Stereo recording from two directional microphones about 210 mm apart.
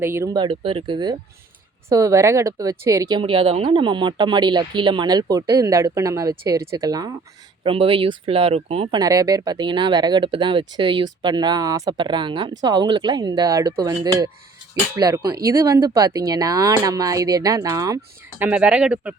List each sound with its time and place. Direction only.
0.0 s speech: 10° right (ahead or behind)